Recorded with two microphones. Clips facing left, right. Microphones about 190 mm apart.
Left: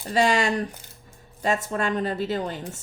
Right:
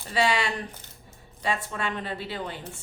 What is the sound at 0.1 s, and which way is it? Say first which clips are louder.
Speech: left 4 dB; 45° left (ahead or behind).